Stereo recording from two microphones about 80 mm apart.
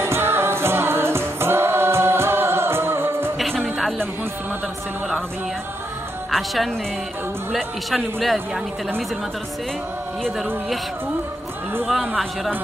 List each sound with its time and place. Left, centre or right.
0.0 s music: right
3.3 s music: centre
6.3 s a man's voice: centre
10.2 s a man's voice: centre
11.8 s a man's voice: centre